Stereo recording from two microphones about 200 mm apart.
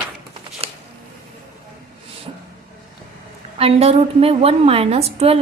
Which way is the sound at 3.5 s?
30° right (ahead or behind).